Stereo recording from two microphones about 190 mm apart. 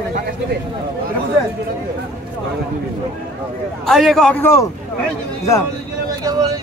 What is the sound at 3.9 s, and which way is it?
Speech, centre (ahead or behind).